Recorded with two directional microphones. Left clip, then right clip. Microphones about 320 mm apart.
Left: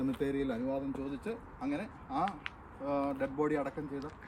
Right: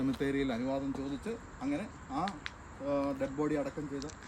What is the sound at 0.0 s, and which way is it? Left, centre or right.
Speech, centre.